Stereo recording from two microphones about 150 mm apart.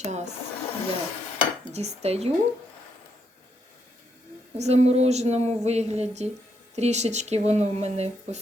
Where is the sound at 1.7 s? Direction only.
45° right (ahead or behind).